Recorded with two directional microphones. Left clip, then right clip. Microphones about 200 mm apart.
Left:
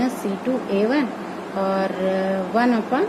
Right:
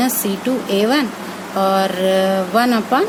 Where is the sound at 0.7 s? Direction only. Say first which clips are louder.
Right 5 dB; 35° right (ahead or behind).